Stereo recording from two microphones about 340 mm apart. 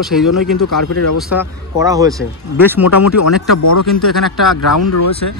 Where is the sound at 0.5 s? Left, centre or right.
Left.